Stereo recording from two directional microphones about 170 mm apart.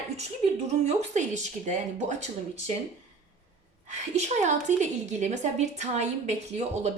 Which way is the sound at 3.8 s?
45° right (ahead or behind).